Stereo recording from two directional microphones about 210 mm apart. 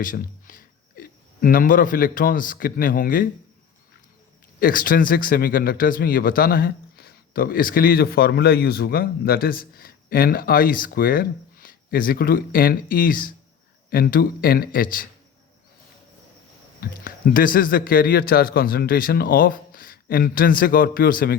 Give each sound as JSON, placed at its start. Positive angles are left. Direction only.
{"t": 0.0, "sound": "speech", "side_deg": 40}
{"t": 4.6, "sound": "a man's voice", "side_deg": 40}
{"t": 16.8, "sound": "a man's voice", "side_deg": 40}